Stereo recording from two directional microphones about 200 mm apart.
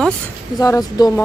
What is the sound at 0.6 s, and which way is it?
Speech, 20° left (ahead or behind).